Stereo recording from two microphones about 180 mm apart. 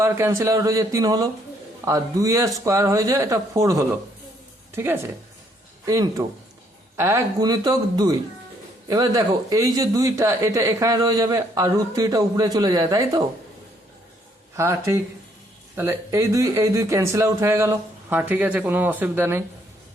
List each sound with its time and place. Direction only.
0.0 s speech: 15° right (ahead or behind)
14.5 s speech: 15° right (ahead or behind)